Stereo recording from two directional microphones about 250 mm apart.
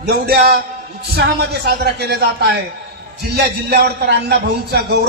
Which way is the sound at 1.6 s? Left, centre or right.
Right.